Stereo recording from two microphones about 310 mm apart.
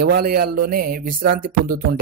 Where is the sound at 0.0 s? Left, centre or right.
Right.